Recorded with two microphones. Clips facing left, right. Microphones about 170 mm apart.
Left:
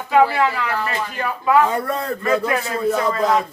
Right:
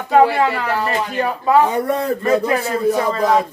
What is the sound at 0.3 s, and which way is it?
Speech, 40° right (ahead or behind).